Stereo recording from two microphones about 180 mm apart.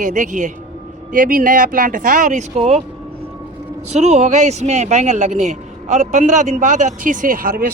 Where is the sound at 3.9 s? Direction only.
40° right (ahead or behind).